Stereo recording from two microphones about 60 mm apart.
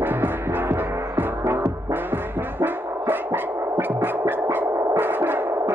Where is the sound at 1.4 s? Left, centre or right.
Right.